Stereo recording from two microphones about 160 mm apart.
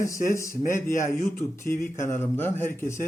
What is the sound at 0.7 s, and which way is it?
Speech, 15° left (ahead or behind).